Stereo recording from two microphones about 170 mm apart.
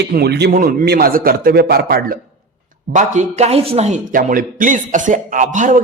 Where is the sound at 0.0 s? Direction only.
70° right (ahead or behind).